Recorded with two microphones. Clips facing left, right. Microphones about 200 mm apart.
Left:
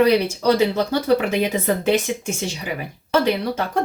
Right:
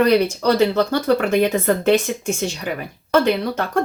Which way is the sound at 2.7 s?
55° right (ahead or behind).